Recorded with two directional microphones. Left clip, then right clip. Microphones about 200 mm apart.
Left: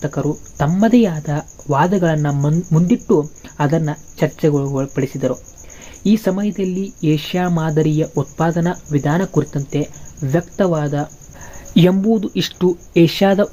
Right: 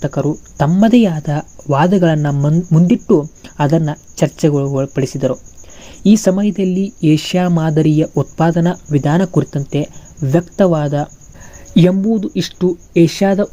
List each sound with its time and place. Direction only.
0.0 s cricket: 30° right (ahead or behind)
11.7 s speech: 15° right (ahead or behind)